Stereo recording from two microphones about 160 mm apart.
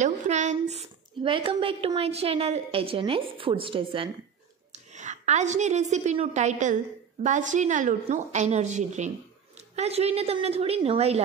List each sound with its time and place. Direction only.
0.0 s speech: 50° right (ahead or behind)
4.7 s a woman's voice: 50° right (ahead or behind)